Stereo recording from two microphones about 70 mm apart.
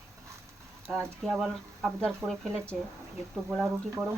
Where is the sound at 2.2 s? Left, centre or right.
Right.